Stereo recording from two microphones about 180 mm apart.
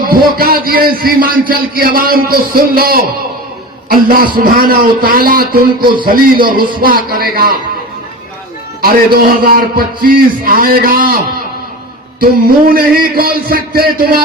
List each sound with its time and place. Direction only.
0.0 s a man's voice: 55° right (ahead or behind)
8.8 s a man's voice: 55° right (ahead or behind)
12.2 s a man's voice: 55° right (ahead or behind)